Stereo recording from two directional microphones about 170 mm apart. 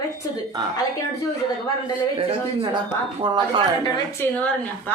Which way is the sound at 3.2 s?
30° right (ahead or behind).